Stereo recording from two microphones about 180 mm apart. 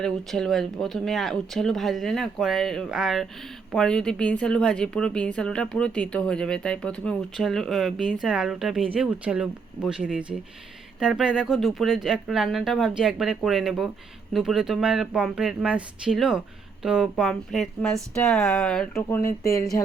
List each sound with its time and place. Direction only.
0.0 s speech: 5° left (ahead or behind)
19.2 s speech: 15° left (ahead or behind)